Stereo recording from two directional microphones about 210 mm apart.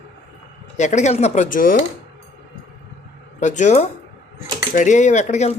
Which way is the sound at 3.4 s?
35° left (ahead or behind).